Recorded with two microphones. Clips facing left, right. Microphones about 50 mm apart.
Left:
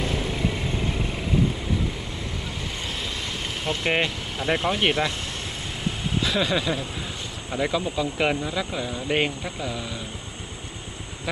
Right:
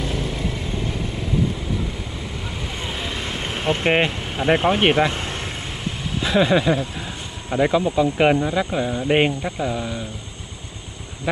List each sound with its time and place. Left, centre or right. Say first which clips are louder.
0.1 s vehicle: even; centre
2.8 s vehicle: right 5 dB; centre
6.2 s speech: right 8 dB; right